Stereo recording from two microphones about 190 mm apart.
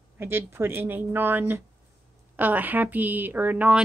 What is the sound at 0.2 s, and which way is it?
Speech, 10° right (ahead or behind).